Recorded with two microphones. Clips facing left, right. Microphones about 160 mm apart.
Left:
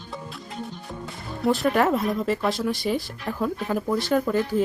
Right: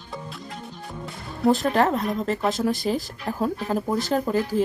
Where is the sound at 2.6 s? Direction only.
40° right (ahead or behind).